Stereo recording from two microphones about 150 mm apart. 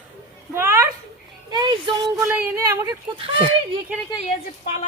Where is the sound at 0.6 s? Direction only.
20° right (ahead or behind).